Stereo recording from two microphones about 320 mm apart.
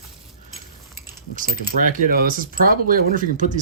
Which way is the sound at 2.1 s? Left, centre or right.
Right.